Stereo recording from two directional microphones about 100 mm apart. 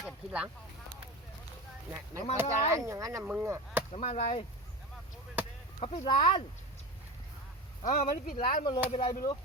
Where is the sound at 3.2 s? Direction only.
15° right (ahead or behind).